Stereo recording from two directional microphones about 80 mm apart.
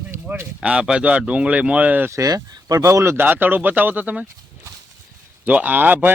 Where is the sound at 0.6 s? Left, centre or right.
Centre.